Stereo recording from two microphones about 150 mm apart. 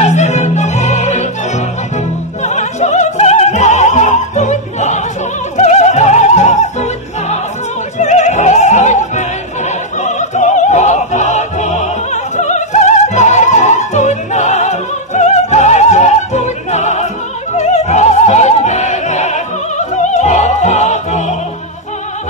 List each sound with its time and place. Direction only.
0.0 s music: 50° left (ahead or behind)
9.7 s opera: 50° left (ahead or behind)